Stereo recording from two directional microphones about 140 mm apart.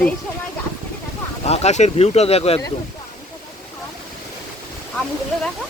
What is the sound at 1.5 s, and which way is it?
Speech, 50° left (ahead or behind).